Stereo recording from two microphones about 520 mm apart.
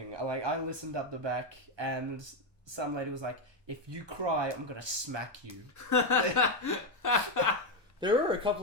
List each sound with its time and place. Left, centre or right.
0.1 s speech: right
5.7 s chuckle: left
8.0 s speech: centre